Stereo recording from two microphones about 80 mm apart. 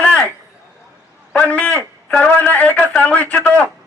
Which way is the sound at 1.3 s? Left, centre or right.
Centre.